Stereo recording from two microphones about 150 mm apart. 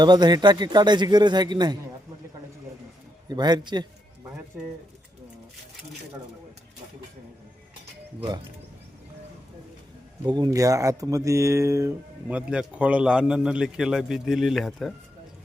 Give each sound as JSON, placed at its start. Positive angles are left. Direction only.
{"t": 0.0, "sound": "a man's voice", "side_deg": -30}
{"t": 3.2, "sound": "a man's voice", "side_deg": -30}
{"t": 4.5, "sound": "speech", "side_deg": -5}
{"t": 10.2, "sound": "speech", "side_deg": -30}